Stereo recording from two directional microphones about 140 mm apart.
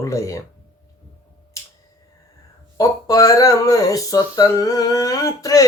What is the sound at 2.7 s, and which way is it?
Mantra, 25° left (ahead or behind).